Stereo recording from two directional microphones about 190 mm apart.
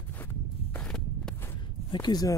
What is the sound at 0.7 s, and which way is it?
Walk, 5° left (ahead or behind).